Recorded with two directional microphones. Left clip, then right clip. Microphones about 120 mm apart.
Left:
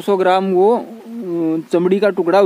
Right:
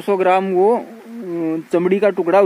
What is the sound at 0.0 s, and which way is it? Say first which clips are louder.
Speech: left 1 dB; 20° left (ahead or behind).